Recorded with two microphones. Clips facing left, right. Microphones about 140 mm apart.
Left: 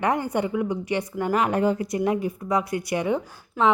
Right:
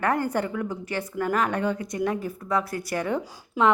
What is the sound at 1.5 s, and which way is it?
Speech, 30° left (ahead or behind).